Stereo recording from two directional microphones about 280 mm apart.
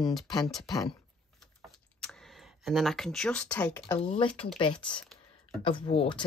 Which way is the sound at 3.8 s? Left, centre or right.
Centre.